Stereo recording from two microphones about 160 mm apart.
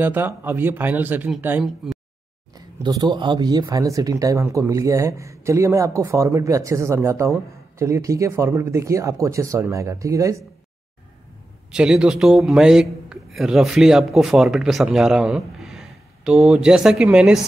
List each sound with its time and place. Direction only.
0.0 s speech: 10° right (ahead or behind)
1.8 s a sound: centre (ahead or behind)
2.5 s speech: 25° right (ahead or behind)
11.7 s a man's voice: 5° right (ahead or behind)